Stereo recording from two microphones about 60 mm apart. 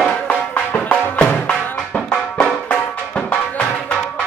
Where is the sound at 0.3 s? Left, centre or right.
Left.